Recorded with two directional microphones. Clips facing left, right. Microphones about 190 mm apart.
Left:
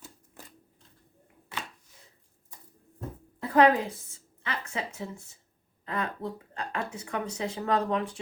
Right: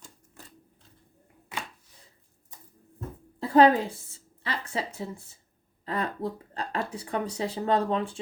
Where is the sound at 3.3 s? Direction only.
30° right (ahead or behind).